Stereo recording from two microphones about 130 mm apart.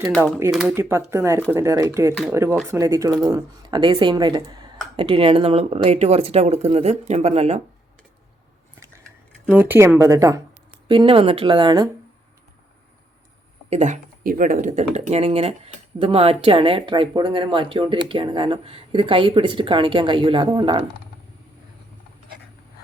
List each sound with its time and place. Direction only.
0.7 s a woman's voice: 20° right (ahead or behind); by 7.6 s 55° right (ahead or behind)
9.5 s a woman's voice: 15° right (ahead or behind)
10.8 s a woman's voice: 40° right (ahead or behind)
13.7 s speech: 60° right (ahead or behind); by 20.8 s 35° right (ahead or behind)